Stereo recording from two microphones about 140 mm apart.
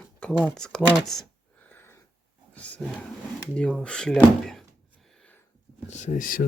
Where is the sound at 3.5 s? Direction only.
5° left (ahead or behind).